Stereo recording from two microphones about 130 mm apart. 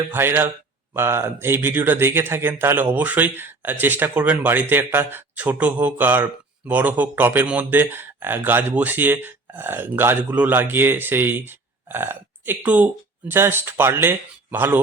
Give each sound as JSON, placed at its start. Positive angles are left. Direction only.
{"t": 0.1, "sound": "speech", "side_deg": -15}